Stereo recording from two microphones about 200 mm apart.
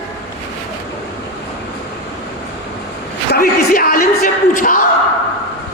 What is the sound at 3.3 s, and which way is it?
Speech, 45° left (ahead or behind).